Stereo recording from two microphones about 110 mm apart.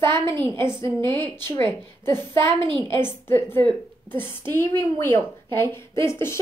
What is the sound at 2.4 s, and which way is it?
Speech, 50° right (ahead or behind).